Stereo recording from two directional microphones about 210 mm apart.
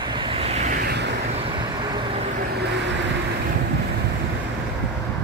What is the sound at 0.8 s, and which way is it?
Vehicle, 50° right (ahead or behind).